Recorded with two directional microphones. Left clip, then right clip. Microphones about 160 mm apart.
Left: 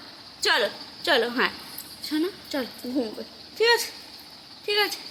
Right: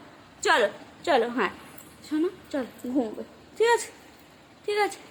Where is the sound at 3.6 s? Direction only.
20° right (ahead or behind).